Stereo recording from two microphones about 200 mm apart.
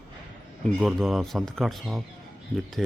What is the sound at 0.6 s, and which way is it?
Speech, centre (ahead or behind).